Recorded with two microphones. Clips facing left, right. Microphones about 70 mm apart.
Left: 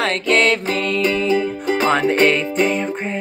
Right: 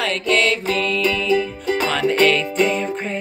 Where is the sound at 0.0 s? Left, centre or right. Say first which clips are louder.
Left 2 dB; left.